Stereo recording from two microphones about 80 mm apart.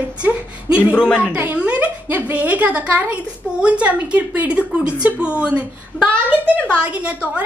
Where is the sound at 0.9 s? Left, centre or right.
Centre.